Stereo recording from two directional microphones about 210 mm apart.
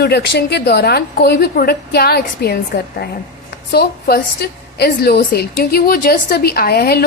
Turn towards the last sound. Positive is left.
turn(degrees=50)  # may be behind; listen again after turning